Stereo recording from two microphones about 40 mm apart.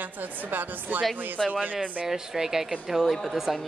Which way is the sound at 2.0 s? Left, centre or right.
Centre.